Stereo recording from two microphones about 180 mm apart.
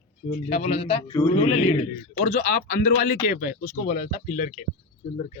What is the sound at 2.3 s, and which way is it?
Speech, 45° left (ahead or behind).